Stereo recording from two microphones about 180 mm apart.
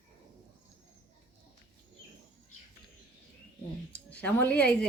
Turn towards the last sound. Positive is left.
turn(degrees=5)  # may be behind; listen again after turning